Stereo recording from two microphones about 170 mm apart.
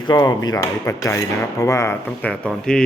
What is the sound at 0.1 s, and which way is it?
Cutlery, 20° left (ahead or behind).